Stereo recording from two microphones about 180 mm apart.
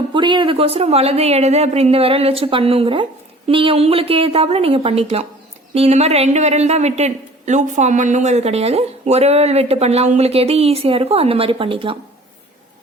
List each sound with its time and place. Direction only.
0.1 s speech: 25° right (ahead or behind)